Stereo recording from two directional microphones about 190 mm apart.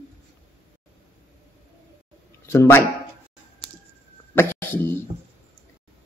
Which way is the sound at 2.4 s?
15° left (ahead or behind).